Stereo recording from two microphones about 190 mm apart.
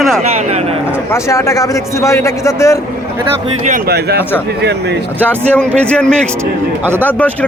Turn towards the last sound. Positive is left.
turn(degrees=10)  # may be behind; listen again after turning